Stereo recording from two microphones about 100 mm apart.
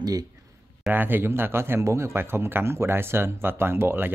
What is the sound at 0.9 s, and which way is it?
A man's voice, 20° right (ahead or behind).